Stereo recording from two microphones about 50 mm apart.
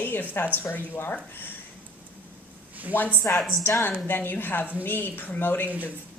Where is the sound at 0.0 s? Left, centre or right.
Left.